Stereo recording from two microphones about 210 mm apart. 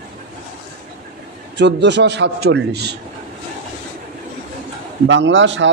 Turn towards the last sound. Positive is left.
turn(degrees=-60)  # may be behind; listen again after turning